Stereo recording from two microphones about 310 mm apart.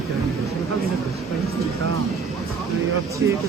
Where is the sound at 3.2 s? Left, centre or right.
Centre.